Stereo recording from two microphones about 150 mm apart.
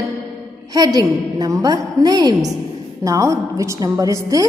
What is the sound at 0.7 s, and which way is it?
A woman's voice, 25° right (ahead or behind).